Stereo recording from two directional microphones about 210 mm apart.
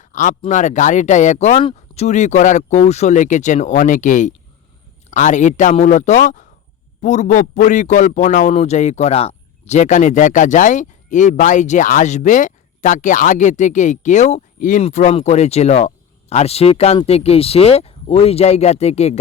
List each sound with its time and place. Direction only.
0.0 s a man's voice: 35° left (ahead or behind)